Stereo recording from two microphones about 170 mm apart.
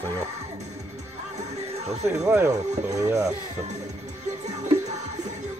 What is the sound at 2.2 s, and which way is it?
Speech, 15° right (ahead or behind).